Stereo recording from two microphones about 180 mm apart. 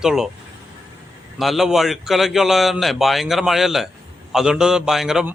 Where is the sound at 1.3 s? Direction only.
Centre (ahead or behind).